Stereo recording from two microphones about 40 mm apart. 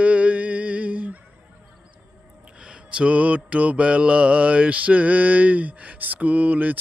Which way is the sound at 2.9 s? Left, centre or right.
Right.